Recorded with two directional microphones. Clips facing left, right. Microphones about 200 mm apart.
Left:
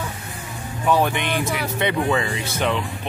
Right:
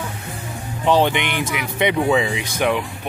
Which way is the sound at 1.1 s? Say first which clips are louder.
Right 1 dB; 80° right.